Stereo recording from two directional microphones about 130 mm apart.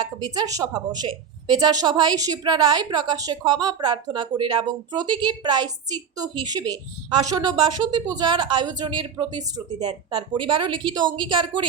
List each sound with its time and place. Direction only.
0.0 s a woman's voice: 30° right (ahead or behind)